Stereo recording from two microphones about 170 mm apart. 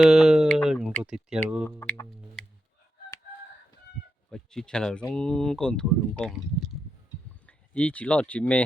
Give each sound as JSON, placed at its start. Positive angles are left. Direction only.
{"t": 0.1, "sound": "a sound", "side_deg": 0}
{"t": 1.0, "sound": "speech", "side_deg": -5}
{"t": 1.8, "sound": "speech", "side_deg": 15}
{"t": 2.4, "sound": "fowl", "side_deg": 5}
{"t": 4.3, "sound": "speech", "side_deg": 5}